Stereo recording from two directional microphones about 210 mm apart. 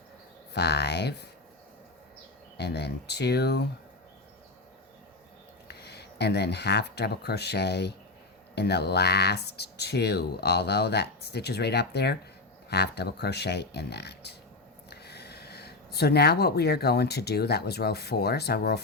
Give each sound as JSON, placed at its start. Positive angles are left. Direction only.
{"t": 0.5, "sound": "speech", "side_deg": 50}
{"t": 2.6, "sound": "speech", "side_deg": 50}
{"t": 5.6, "sound": "speech", "side_deg": 50}